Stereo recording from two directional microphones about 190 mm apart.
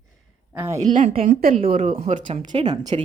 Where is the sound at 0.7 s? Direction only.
40° right (ahead or behind).